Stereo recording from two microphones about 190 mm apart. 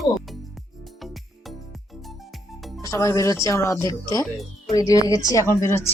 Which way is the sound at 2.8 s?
15° left (ahead or behind).